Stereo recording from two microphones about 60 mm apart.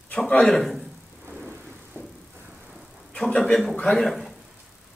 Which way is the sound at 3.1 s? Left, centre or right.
Centre.